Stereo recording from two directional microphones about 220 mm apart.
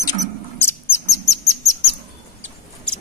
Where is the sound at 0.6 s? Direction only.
10° left (ahead or behind).